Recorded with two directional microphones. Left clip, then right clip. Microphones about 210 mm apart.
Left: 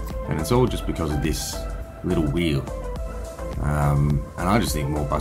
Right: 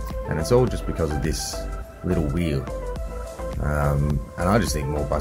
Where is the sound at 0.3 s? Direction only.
25° right (ahead or behind).